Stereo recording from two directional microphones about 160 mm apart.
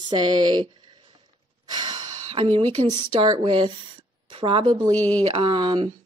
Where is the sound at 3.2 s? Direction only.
30° right (ahead or behind).